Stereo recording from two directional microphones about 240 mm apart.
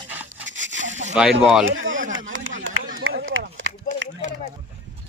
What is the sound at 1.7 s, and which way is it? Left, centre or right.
Speech, right.